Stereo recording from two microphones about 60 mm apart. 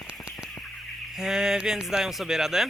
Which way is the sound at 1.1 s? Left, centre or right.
Centre.